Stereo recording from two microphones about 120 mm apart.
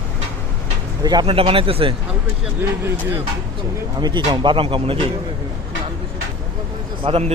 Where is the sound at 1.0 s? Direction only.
35° right (ahead or behind).